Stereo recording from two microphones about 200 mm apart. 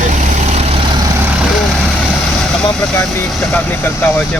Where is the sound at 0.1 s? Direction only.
40° right (ahead or behind).